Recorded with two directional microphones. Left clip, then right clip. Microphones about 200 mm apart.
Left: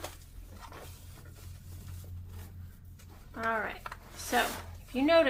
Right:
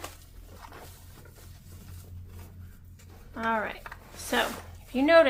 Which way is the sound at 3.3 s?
25° right (ahead or behind).